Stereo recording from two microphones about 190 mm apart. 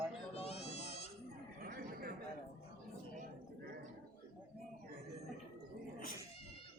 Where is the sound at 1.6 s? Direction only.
50° right (ahead or behind).